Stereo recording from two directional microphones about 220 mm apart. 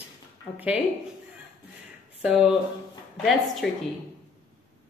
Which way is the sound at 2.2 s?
5° right (ahead or behind).